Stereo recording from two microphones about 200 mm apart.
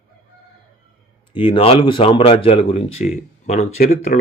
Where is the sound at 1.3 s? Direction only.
25° left (ahead or behind).